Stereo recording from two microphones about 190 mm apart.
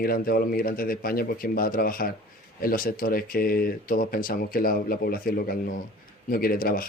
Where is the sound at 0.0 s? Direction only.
50° left (ahead or behind).